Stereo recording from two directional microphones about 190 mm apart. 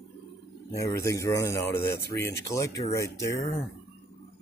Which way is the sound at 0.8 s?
15° left (ahead or behind).